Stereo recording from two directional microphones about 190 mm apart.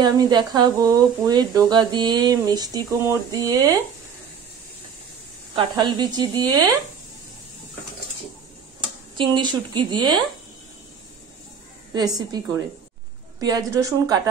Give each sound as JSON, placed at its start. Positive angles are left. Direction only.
{"t": 0.0, "sound": "speech", "side_deg": -20}
{"t": 5.5, "sound": "speech", "side_deg": -25}
{"t": 9.1, "sound": "speech", "side_deg": -25}
{"t": 11.9, "sound": "speech", "side_deg": -20}
{"t": 13.4, "sound": "speech", "side_deg": -20}